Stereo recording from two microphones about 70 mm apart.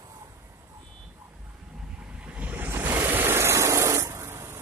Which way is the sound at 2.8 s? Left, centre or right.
Right.